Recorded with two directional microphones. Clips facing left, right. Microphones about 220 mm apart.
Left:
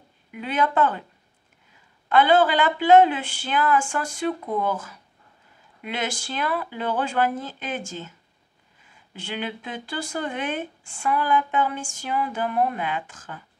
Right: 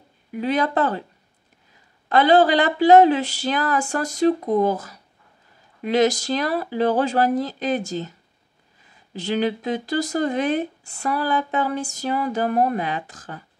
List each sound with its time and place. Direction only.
0.3 s speech: 35° right (ahead or behind)
2.0 s speech: 40° right (ahead or behind)